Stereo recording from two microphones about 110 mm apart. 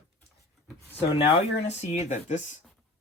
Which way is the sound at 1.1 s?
70° left (ahead or behind).